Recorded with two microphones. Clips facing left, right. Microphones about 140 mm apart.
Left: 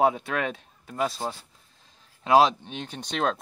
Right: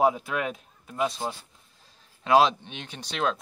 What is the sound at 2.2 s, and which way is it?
Speech, 35° left (ahead or behind).